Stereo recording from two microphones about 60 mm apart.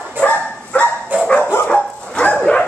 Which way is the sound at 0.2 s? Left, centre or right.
Left.